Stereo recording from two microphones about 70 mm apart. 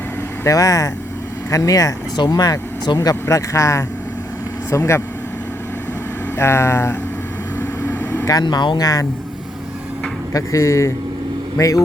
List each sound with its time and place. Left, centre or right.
0.4 s speech: left
2.1 s speech: left
6.3 s speech: left
7.8 s vehicle: left
8.2 s speech: left
10.3 s speech: left